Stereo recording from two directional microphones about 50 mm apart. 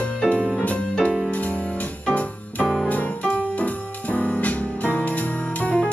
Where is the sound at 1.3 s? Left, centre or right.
Left.